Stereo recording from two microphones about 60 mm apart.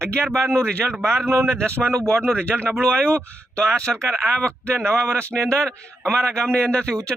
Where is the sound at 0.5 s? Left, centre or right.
Centre.